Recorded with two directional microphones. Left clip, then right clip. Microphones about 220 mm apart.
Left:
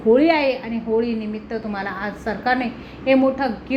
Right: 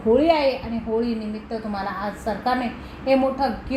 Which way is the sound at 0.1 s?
15° left (ahead or behind).